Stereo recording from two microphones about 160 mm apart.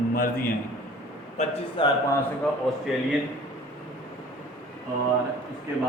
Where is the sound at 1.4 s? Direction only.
30° left (ahead or behind).